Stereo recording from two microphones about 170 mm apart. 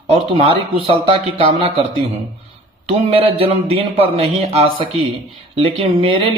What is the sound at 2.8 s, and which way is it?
A man's voice, 35° right (ahead or behind).